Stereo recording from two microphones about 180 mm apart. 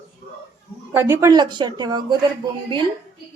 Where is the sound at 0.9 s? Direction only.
10° right (ahead or behind).